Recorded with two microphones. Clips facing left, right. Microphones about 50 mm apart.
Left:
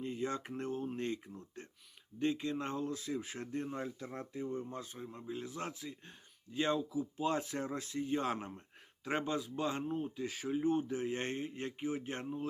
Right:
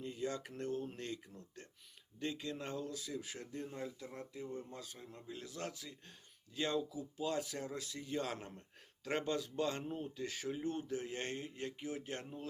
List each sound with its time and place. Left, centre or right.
0.0 s speech: left
9.0 s speech: centre